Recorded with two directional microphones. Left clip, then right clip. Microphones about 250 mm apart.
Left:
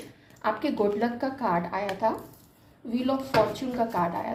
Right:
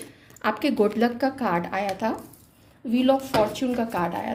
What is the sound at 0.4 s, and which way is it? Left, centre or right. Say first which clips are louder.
A woman's voice: right 3 dB; right.